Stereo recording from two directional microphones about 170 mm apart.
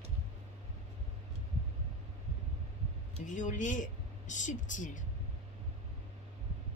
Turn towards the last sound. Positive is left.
turn(degrees=50)  # may be behind; listen again after turning